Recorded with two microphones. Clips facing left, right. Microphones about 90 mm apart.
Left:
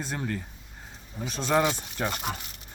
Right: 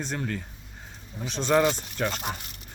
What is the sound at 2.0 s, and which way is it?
Speech, 15° left (ahead or behind).